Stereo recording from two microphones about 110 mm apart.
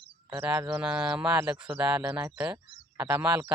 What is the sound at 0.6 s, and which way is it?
Speech, 20° right (ahead or behind).